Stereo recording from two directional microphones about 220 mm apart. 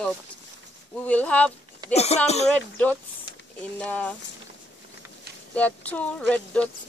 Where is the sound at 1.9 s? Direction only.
30° left (ahead or behind).